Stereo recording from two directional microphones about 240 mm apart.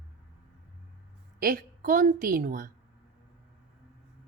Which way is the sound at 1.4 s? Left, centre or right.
Right.